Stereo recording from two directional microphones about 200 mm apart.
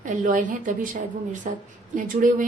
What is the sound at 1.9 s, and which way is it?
Speech, 40° right (ahead or behind).